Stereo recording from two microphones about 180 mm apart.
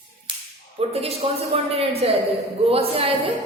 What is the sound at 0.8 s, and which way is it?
A woman's voice, 35° right (ahead or behind).